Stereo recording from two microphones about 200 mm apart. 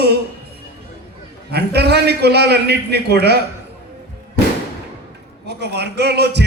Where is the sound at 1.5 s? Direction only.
55° right (ahead or behind).